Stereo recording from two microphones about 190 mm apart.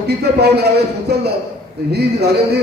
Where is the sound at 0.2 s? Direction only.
55° right (ahead or behind).